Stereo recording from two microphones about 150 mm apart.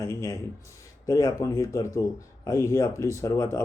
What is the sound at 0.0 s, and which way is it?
Speech, 20° left (ahead or behind).